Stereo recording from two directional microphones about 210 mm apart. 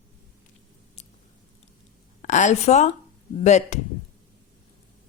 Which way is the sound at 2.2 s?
35° left (ahead or behind).